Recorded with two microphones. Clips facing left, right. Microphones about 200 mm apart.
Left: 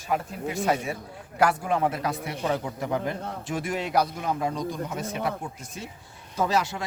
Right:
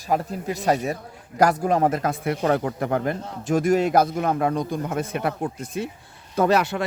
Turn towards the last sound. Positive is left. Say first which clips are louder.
# right 6 dB
turn(degrees=-60)  # may be behind; listen again after turning